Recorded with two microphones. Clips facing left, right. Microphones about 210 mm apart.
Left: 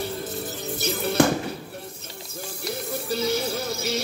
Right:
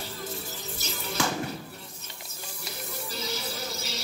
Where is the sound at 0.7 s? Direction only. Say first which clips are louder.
Left 12 dB; 60° left (ahead or behind).